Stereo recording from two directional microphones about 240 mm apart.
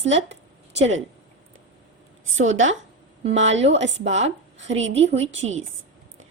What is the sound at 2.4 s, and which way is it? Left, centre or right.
A woman's voice, right.